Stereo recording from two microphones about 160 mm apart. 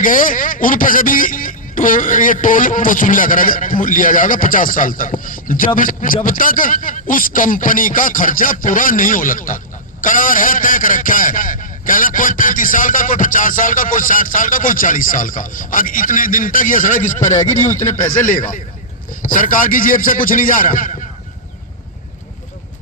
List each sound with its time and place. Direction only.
0.0 s a man's voice: 55° left (ahead or behind)